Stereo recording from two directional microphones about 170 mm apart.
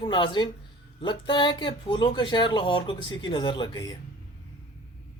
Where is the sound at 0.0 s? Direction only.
30° left (ahead or behind).